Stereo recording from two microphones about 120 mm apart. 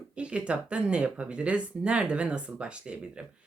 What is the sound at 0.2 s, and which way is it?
Speech, 10° right (ahead or behind).